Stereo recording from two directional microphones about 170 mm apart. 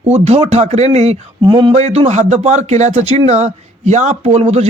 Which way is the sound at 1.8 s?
40° right (ahead or behind).